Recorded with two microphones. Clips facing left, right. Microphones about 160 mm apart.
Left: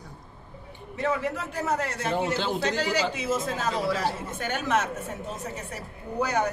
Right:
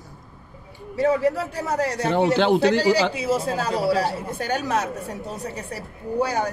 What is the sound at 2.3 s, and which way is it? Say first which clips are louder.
Speech: right 9 dB; 65° right (ahead or behind).